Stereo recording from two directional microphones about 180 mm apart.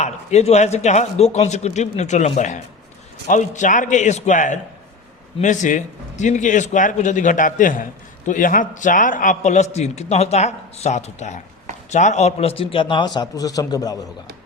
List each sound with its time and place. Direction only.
0.0 s a man's voice: 40° left (ahead or behind); by 14.0 s 20° left (ahead or behind)